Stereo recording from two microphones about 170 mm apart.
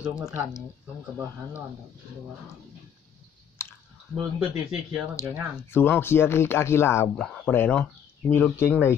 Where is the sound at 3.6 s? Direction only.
15° left (ahead or behind).